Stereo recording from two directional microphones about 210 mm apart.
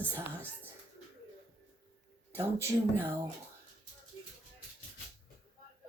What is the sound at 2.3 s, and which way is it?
Speech, 10° right (ahead or behind).